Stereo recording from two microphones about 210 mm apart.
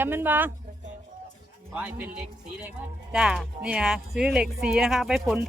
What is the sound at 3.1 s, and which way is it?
Speech, 5° right (ahead or behind).